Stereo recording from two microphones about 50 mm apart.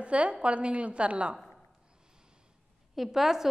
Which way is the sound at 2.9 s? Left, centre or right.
Centre.